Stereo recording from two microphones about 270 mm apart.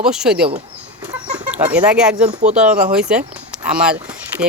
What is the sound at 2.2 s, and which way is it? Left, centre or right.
Speech, right.